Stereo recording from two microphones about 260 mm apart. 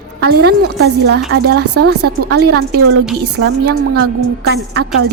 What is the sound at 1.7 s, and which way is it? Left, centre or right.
A woman's voice, right.